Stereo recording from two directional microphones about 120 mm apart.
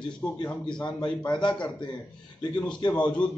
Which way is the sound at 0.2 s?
15° left (ahead or behind).